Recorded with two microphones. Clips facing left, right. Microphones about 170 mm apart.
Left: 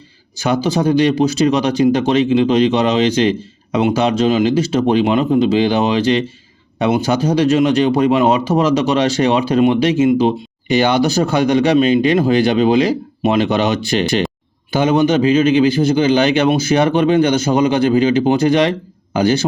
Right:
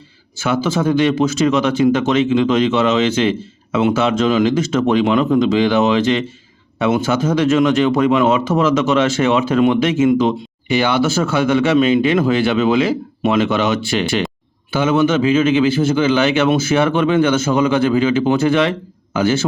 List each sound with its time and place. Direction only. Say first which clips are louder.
0.3 s speech: left 1 dB; 35° left (ahead or behind)